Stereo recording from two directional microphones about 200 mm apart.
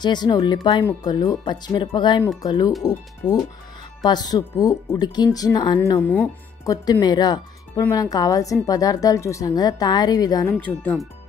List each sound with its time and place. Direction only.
0.0 s speech: 20° left (ahead or behind)
5.8 s speech: 10° left (ahead or behind)